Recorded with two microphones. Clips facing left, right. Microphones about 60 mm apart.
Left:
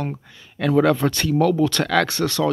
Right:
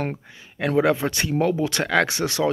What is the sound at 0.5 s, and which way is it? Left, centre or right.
Speech, centre.